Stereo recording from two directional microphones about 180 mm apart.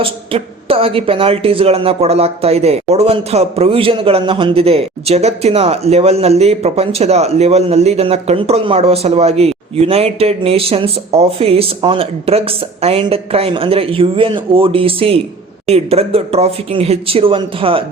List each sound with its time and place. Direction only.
0.0 s speech: 30° right (ahead or behind)